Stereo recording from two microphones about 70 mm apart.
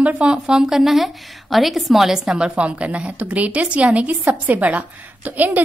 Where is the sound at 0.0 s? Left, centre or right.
Centre.